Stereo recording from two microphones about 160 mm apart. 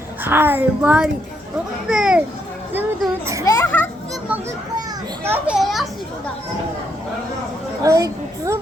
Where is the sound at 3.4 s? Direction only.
20° left (ahead or behind).